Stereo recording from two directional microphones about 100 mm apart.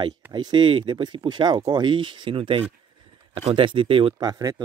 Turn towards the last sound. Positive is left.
turn(degrees=-40)  # may be behind; listen again after turning